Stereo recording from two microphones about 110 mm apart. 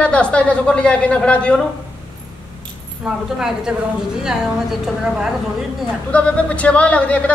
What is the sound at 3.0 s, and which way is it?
A woman's voice, 5° right (ahead or behind).